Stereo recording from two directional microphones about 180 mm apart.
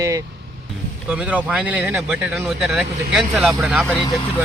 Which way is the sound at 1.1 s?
5° right (ahead or behind).